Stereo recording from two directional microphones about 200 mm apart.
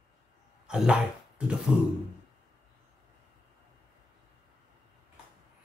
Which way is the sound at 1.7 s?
5° right (ahead or behind).